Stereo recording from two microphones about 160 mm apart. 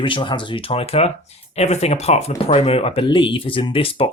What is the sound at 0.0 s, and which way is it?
Speech, 30° left (ahead or behind).